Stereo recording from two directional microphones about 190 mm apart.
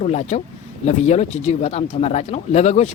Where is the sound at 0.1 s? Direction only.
35° left (ahead or behind).